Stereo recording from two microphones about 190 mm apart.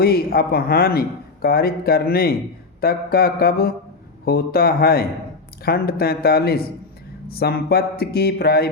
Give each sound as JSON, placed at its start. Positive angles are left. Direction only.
{"t": 0.0, "sound": "a man's voice", "side_deg": 55}